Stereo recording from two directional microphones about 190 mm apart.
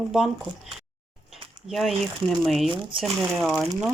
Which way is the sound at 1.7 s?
Centre (ahead or behind).